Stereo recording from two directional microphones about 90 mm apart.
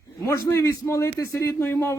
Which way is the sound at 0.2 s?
30° left (ahead or behind).